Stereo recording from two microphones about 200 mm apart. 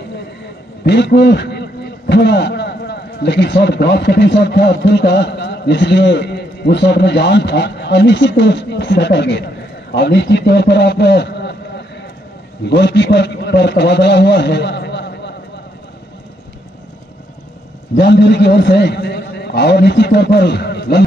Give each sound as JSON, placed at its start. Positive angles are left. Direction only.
{"t": 0.8, "sound": "a man's voice", "side_deg": 60}
{"t": 17.9, "sound": "a man's voice", "side_deg": 55}